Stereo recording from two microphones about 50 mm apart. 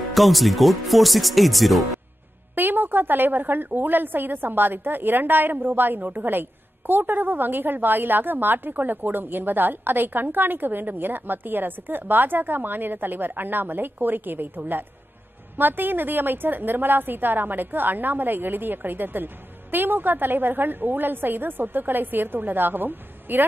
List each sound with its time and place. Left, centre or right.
0.1 s speech: centre
2.5 s a woman's voice: right